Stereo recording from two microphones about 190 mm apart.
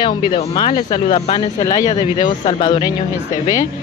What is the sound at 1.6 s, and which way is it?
Speech, 20° left (ahead or behind).